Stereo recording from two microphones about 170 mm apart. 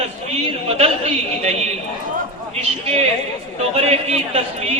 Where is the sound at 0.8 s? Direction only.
40° right (ahead or behind).